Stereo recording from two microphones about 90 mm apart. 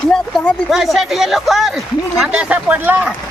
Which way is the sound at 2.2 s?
15° right (ahead or behind).